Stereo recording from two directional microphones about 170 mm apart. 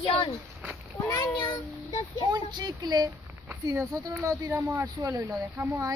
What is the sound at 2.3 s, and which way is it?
Speech, 25° right (ahead or behind).